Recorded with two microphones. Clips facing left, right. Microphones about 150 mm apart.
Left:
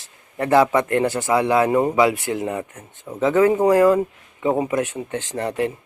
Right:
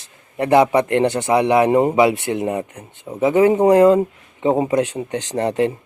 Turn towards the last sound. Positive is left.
turn(degrees=-25)  # may be behind; listen again after turning